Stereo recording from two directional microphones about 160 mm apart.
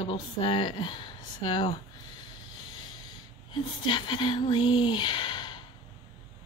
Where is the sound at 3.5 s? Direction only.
30° left (ahead or behind).